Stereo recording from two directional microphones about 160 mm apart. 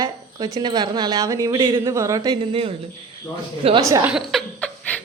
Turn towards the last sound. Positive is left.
turn(degrees=10)  # may be behind; listen again after turning